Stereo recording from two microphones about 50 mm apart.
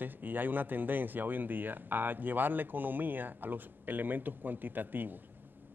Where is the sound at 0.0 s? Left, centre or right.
Right.